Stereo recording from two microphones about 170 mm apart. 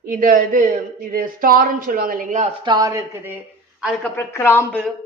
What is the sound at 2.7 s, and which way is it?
Speech, 20° right (ahead or behind).